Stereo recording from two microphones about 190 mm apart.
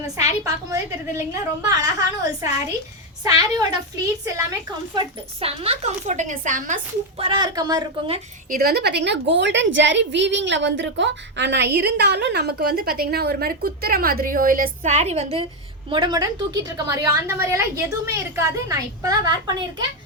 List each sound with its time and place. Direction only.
0.4 s a woman's voice: 15° right (ahead or behind)
4.9 s a woman's voice: 30° right (ahead or behind)
7.2 s a woman's voice: 25° right (ahead or behind)
8.4 s a woman's voice: 50° right (ahead or behind); by 19.6 s 20° right (ahead or behind)